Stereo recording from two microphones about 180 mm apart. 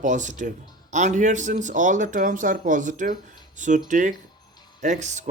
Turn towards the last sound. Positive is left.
turn(degrees=-40)  # may be behind; listen again after turning